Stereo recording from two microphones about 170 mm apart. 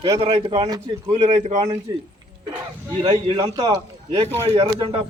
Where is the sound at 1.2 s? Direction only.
35° right (ahead or behind).